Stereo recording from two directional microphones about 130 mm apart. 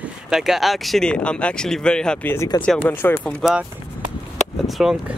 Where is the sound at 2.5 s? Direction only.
30° left (ahead or behind).